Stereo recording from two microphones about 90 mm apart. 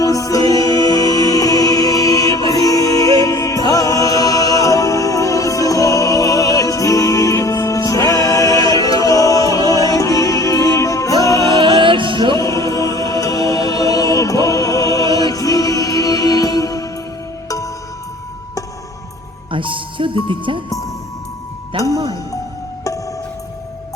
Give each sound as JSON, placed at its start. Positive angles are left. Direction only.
{"t": 0.0, "sound": "music", "side_deg": 40}
{"t": 11.6, "sound": "music", "side_deg": -65}
{"t": 12.7, "sound": "music", "side_deg": 40}
{"t": 19.5, "sound": "music", "side_deg": -70}
{"t": 21.7, "sound": "music", "side_deg": -75}